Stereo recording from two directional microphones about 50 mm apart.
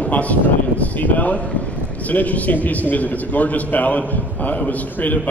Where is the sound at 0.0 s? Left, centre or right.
Left.